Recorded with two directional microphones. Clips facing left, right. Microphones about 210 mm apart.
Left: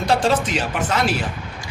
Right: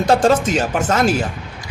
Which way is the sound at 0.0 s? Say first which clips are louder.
Right 5 dB; 45° right (ahead or behind).